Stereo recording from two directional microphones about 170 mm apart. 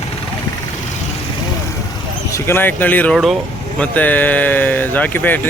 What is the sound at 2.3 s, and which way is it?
Speech, 15° left (ahead or behind).